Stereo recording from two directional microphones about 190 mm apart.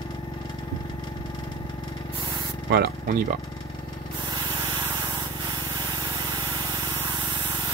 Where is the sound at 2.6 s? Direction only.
55° right (ahead or behind).